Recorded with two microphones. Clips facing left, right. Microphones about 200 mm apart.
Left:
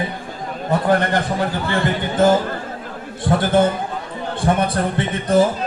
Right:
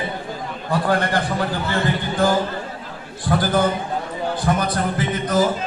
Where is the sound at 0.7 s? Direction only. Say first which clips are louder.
Left 3 dB; 20° left (ahead or behind).